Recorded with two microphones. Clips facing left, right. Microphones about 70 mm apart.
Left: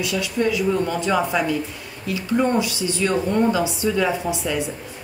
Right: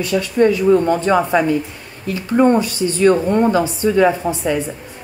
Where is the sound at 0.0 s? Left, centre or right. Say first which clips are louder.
Right 7 dB; right.